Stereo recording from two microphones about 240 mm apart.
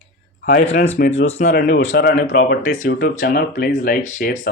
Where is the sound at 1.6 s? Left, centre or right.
Left.